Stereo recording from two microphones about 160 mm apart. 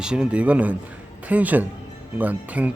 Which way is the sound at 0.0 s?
5° right (ahead or behind).